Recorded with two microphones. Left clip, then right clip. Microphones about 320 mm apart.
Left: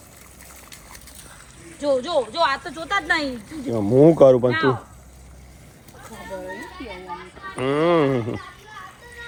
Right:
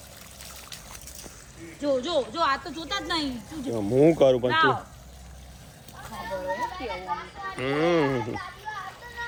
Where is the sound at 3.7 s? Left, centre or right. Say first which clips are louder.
Left 6 dB; left.